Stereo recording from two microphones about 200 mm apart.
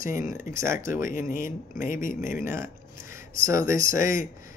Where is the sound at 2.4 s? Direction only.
15° right (ahead or behind).